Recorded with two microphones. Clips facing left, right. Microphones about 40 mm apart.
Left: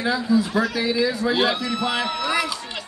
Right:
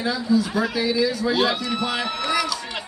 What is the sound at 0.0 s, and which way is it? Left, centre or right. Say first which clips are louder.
Speech: left 1 dB; centre.